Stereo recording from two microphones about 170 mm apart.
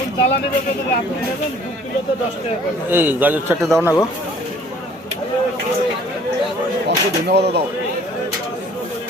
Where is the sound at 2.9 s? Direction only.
10° right (ahead or behind).